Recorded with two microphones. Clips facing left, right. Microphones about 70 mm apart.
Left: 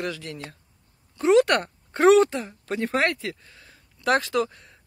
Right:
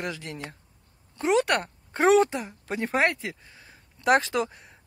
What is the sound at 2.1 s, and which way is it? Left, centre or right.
Speech, centre.